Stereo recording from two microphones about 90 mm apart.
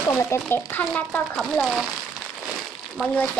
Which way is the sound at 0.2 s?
30° left (ahead or behind).